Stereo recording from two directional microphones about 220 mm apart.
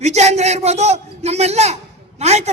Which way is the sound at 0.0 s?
30° right (ahead or behind).